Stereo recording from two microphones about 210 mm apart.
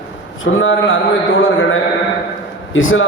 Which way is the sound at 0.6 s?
70° left (ahead or behind).